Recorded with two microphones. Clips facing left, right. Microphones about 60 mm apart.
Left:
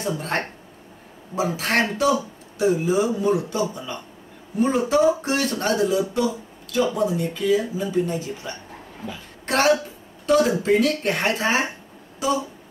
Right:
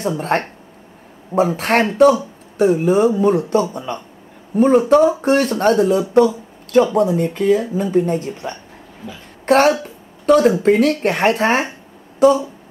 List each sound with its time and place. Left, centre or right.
0.0 s speech: right
1.5 s speech: right
12.2 s a sound: right